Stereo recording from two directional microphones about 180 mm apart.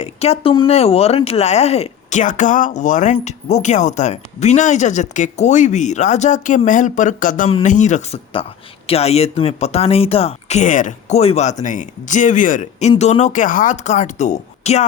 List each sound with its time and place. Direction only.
0.0 s speech: 35° left (ahead or behind)